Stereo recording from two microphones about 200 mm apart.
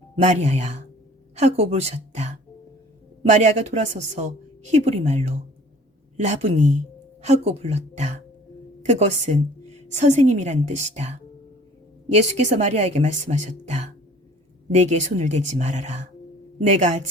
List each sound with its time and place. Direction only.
0.2 s a woman's voice: 35° right (ahead or behind)